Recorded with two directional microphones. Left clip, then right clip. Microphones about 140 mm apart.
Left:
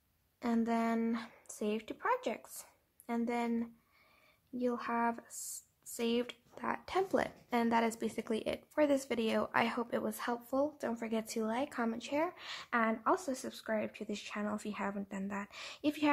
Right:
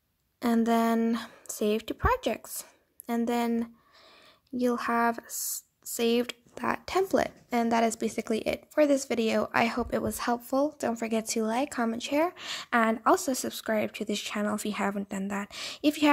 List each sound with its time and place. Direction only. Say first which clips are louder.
0.4 s speech: right 9 dB; 50° right (ahead or behind)